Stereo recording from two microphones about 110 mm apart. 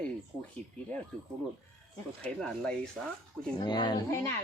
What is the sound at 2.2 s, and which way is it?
Speech, 10° left (ahead or behind).